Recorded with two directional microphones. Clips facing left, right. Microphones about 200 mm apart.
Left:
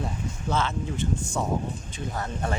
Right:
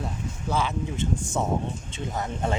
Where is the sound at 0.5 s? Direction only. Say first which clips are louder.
Right 1 dB; 15° right (ahead or behind).